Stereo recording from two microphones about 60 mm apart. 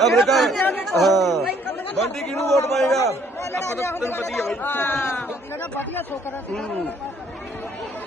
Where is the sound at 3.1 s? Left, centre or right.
Left.